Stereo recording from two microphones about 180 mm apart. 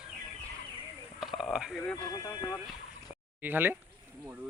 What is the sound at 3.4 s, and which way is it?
Speech, 10° right (ahead or behind).